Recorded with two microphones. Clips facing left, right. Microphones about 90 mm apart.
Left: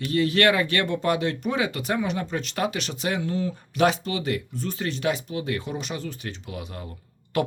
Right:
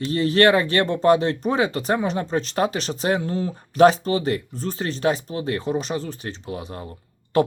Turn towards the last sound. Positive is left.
turn(degrees=-35)  # may be behind; listen again after turning